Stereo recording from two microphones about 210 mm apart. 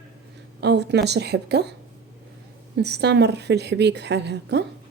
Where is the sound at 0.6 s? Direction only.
55° right (ahead or behind).